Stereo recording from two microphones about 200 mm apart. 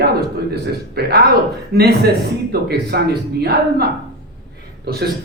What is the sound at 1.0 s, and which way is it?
Speech, 55° right (ahead or behind).